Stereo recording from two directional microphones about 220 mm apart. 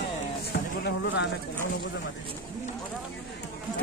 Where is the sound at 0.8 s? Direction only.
55° left (ahead or behind).